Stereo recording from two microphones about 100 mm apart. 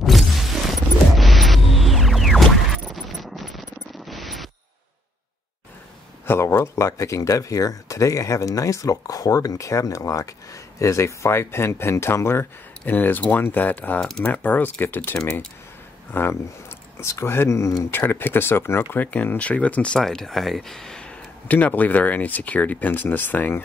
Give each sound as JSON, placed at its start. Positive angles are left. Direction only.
{"t": 0.0, "sound": "a sound", "side_deg": 0}
{"t": 6.2, "sound": "speech", "side_deg": 25}
{"t": 14.0, "sound": "speech", "side_deg": 5}
{"t": 14.3, "sound": "speech", "side_deg": 15}